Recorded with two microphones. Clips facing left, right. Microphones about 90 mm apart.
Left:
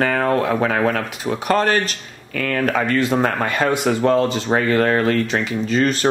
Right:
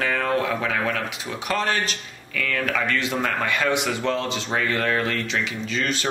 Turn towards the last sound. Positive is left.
turn(degrees=45)  # may be behind; listen again after turning